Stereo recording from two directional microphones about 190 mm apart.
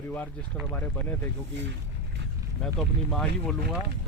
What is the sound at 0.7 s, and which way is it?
Speech, 10° left (ahead or behind).